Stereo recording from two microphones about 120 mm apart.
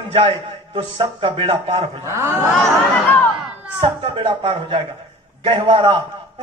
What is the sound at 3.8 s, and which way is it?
A man's voice, 45° right (ahead or behind).